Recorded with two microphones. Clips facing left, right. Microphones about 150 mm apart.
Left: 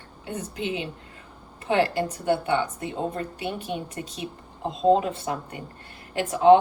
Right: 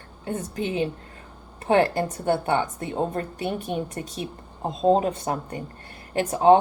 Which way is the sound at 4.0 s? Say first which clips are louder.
Right 2 dB; 35° right (ahead or behind).